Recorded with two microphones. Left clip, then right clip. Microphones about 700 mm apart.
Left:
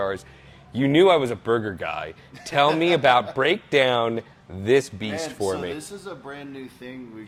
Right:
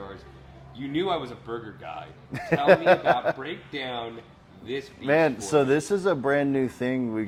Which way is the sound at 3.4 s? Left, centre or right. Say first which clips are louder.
Left 14 dB; left.